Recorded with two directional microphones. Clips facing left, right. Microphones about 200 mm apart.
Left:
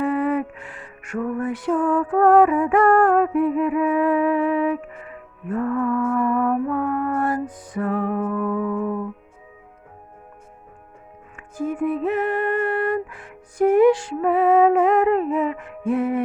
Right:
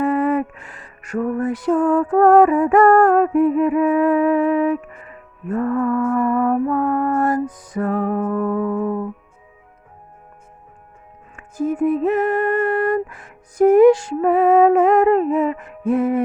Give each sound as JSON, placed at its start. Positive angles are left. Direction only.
{"t": 0.0, "sound": "music", "side_deg": -45}
{"t": 5.5, "sound": "mantra", "side_deg": -40}
{"t": 11.3, "sound": "music", "side_deg": -40}